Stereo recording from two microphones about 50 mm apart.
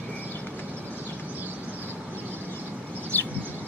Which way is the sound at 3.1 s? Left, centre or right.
Left.